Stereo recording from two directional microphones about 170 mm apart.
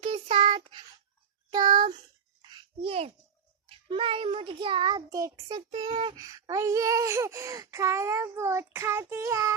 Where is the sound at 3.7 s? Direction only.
30° right (ahead or behind).